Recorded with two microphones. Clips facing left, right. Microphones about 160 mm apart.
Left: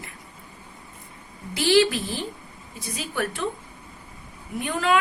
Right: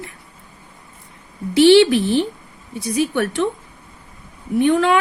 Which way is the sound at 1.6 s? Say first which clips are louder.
Right 9 dB; 75° right (ahead or behind).